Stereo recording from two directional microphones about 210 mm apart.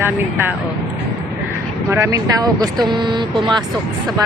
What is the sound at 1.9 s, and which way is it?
A man's voice, 15° right (ahead or behind).